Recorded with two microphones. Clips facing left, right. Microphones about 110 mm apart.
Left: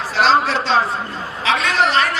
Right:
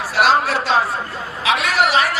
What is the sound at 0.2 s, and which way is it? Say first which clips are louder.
Speech: even; 10° right (ahead or behind).